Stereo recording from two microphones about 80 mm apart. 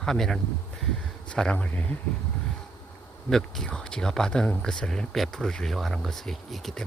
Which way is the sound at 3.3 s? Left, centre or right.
Centre.